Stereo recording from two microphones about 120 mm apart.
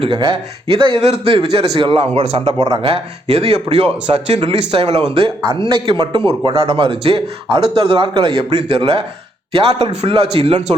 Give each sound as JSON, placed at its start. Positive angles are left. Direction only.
{"t": 0.0, "sound": "a man's voice", "side_deg": -45}
{"t": 5.4, "sound": "a man's voice", "side_deg": -40}
{"t": 8.4, "sound": "a man's voice", "side_deg": -55}